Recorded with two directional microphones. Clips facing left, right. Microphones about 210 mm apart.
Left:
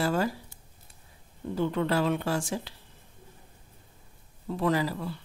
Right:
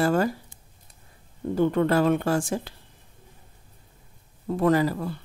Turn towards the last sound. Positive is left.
turn(degrees=-50)  # may be behind; listen again after turning